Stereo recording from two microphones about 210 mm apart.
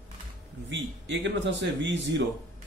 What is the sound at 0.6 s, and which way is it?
A man's voice, 60° right (ahead or behind).